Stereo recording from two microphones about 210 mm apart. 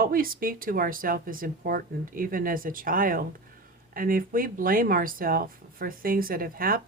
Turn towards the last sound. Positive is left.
turn(degrees=-45)  # may be behind; listen again after turning